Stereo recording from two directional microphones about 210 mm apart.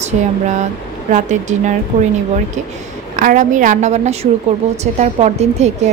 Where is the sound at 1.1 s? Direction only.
35° right (ahead or behind).